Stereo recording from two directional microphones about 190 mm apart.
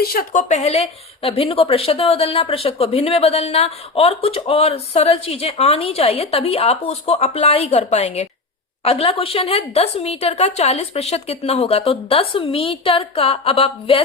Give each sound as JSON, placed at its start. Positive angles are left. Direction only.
{"t": 0.0, "sound": "a woman's voice", "side_deg": 50}